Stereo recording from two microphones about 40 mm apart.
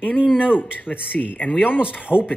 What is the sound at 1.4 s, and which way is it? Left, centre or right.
Speech, left.